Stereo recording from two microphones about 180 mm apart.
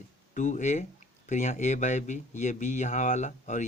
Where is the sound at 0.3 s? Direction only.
45° left (ahead or behind).